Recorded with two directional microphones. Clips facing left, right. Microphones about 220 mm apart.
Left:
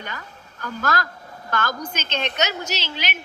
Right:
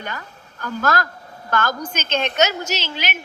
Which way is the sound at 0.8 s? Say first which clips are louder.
Right 4 dB; 45° right (ahead or behind).